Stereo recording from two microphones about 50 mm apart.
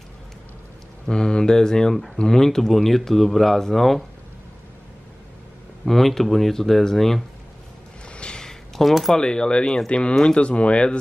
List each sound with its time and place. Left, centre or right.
1.0 s speech: centre
5.9 s speech: centre
8.1 s a sound: left; by 9.1 s centre
9.1 s speech: centre